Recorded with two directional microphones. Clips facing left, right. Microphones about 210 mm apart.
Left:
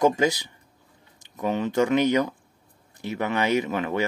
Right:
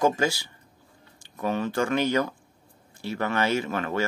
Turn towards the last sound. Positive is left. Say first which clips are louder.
# left 3 dB
turn(degrees=15)  # may be behind; listen again after turning